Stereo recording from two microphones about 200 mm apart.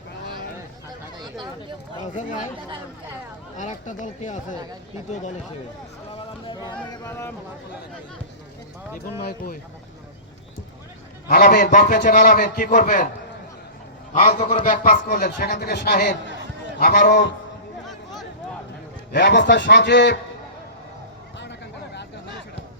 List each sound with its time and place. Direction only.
2.1 s speech: 40° left (ahead or behind)
3.6 s speech: 40° left (ahead or behind)
6.1 s a sound: 25° left (ahead or behind)
7.1 s speech: 10° left (ahead or behind)
11.3 s a man's voice: 50° left (ahead or behind)
14.1 s a man's voice: 35° left (ahead or behind); by 17.3 s 55° left (ahead or behind)
19.1 s a man's voice: 60° left (ahead or behind)